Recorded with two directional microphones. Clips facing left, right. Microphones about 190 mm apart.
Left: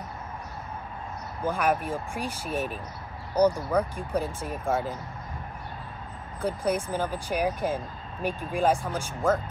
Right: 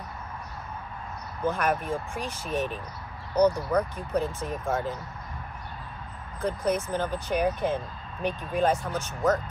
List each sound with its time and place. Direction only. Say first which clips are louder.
1.4 s speech: left 1 dB; 10° left (ahead or behind)
6.4 s speech: even; 10° left (ahead or behind)